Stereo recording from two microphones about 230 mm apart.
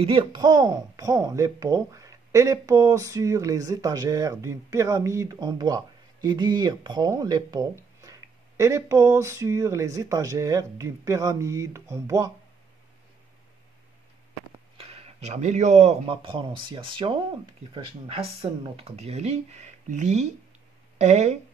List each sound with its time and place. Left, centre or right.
0.0 s speech: right
14.8 s speech: right